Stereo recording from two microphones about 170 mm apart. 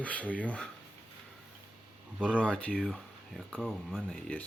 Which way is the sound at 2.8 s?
5° right (ahead or behind).